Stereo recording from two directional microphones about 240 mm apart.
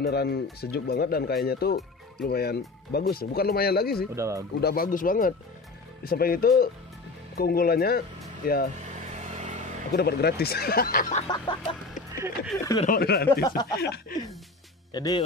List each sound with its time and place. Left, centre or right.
0.0 s speech: left
4.1 s speech: centre
4.6 s speech: left
8.9 s vehicle: right
9.9 s speech: left
11.2 s music: centre
12.7 s speech: left
15.0 s speech: centre